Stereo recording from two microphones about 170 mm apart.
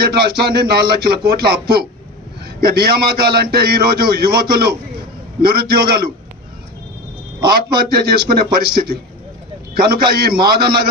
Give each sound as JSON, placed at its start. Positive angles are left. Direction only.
{"t": 0.0, "sound": "a man's voice", "side_deg": -65}
{"t": 7.4, "sound": "a man's voice", "side_deg": -65}